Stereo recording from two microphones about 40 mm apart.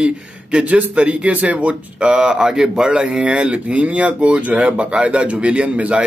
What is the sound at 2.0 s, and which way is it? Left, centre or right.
A man's voice, right.